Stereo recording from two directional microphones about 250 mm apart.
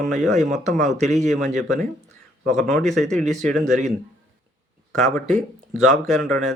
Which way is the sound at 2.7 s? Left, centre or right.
Centre.